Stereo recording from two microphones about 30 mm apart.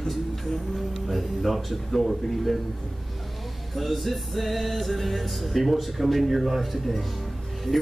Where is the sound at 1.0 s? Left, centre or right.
Centre.